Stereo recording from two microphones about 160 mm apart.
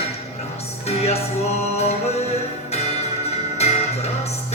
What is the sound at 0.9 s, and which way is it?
Music, 40° left (ahead or behind).